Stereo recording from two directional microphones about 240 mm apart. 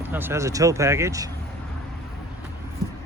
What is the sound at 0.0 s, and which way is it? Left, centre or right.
Speech, centre.